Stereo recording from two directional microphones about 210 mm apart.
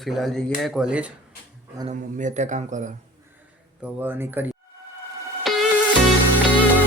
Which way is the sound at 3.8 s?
10° right (ahead or behind).